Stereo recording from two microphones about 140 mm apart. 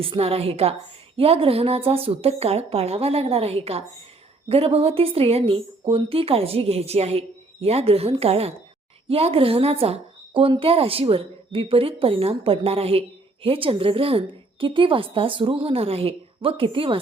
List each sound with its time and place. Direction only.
0.0 s a woman's voice: 45° right (ahead or behind)